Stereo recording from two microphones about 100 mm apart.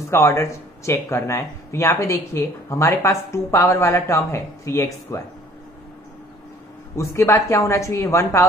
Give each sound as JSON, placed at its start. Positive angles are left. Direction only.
{"t": 0.1, "sound": "speech", "side_deg": 25}
{"t": 7.0, "sound": "speech", "side_deg": 30}